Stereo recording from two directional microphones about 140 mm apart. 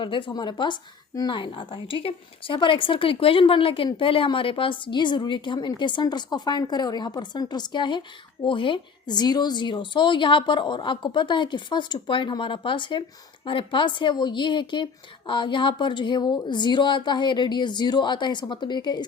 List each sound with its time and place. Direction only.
0.0 s a woman's voice: 35° left (ahead or behind)